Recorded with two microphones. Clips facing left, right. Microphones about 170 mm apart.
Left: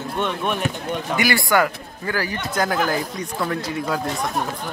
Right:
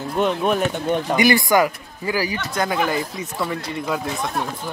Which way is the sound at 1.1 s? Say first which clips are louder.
Right 2 dB; 20° right (ahead or behind).